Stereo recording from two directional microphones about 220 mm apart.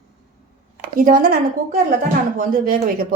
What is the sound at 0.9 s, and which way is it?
Speech, 40° right (ahead or behind).